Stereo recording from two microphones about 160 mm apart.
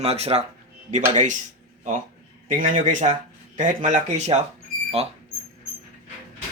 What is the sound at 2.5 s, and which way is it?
Speech, 55° right (ahead or behind).